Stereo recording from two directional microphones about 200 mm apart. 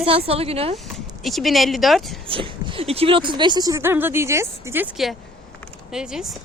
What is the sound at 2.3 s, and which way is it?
Speech, 25° right (ahead or behind).